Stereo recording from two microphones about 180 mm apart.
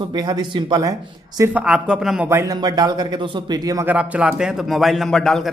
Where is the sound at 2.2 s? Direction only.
15° right (ahead or behind).